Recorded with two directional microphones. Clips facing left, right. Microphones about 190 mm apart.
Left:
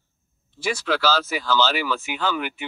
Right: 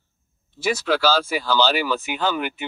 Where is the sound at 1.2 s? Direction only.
30° right (ahead or behind).